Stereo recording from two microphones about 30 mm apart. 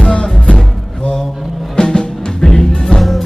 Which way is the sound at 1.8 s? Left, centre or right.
Left.